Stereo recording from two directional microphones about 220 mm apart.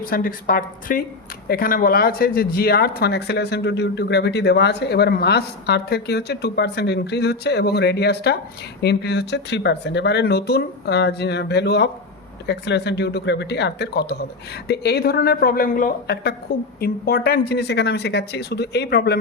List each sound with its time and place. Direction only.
0.0 s a woman's voice: 40° left (ahead or behind)